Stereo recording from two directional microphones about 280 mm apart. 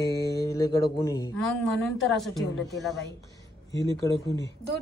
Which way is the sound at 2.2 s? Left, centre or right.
Centre.